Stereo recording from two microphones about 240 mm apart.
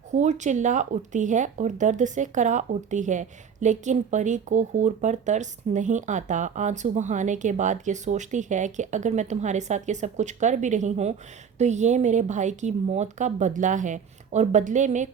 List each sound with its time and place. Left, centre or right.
0.1 s speech: right